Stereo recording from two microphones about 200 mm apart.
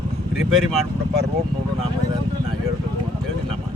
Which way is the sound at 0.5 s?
Centre (ahead or behind).